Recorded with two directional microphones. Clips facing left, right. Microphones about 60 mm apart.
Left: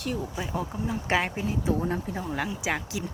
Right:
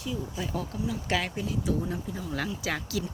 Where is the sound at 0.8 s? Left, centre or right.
Left.